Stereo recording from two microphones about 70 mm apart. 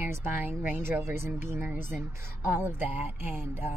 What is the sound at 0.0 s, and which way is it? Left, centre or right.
Speech, right.